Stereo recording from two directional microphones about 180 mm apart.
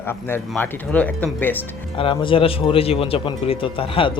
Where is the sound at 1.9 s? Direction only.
30° left (ahead or behind).